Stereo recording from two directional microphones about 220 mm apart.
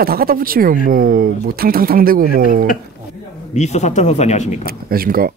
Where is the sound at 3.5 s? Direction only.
30° left (ahead or behind).